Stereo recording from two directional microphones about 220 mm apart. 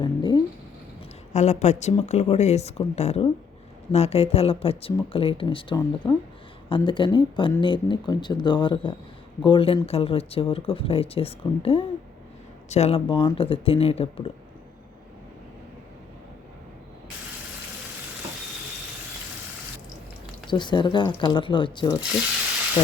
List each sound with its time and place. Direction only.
0.0 s speech: 20° left (ahead or behind)
1.3 s a woman's voice: 30° left (ahead or behind)
20.5 s speech: 20° left (ahead or behind)